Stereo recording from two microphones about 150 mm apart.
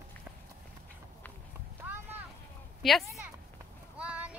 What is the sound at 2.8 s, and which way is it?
Speech, centre (ahead or behind).